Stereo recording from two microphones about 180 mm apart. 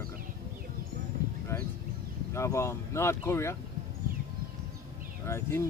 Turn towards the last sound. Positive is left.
turn(degrees=15)  # may be behind; listen again after turning